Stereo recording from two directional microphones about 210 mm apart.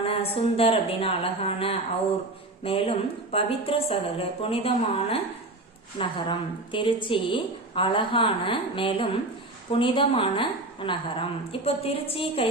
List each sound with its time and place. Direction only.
0.0 s a woman's voice: 25° left (ahead or behind)